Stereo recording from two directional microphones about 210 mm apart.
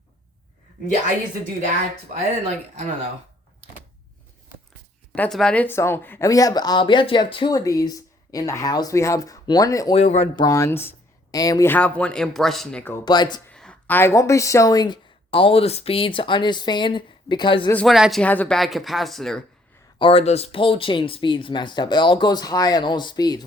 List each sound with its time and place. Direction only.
2.1 s speech: 35° right (ahead or behind)
5.1 s a woman's voice: 5° left (ahead or behind)
9.9 s speech: 30° left (ahead or behind)
10.4 s a woman's voice: 15° left (ahead or behind)
13.1 s speech: 20° left (ahead or behind)
13.5 s a woman's voice: 5° left (ahead or behind); by 17.7 s 20° left (ahead or behind)
17.7 s speech: 5° left (ahead or behind)
20.0 s speech: 25° left (ahead or behind)